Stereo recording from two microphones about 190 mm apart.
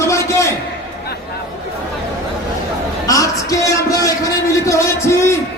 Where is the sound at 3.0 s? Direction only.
15° left (ahead or behind).